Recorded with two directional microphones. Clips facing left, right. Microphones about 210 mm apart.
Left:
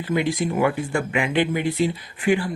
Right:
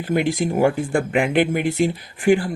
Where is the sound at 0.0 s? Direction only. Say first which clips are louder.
Right 2 dB; 45° right (ahead or behind).